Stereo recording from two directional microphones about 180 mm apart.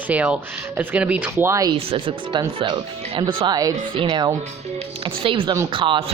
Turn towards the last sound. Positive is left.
turn(degrees=-30)  # may be behind; listen again after turning